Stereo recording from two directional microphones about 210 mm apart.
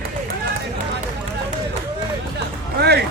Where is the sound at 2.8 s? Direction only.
50° right (ahead or behind).